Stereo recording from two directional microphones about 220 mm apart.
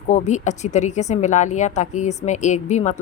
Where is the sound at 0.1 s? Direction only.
30° left (ahead or behind).